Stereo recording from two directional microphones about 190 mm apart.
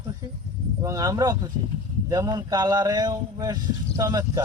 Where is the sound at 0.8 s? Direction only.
20° right (ahead or behind).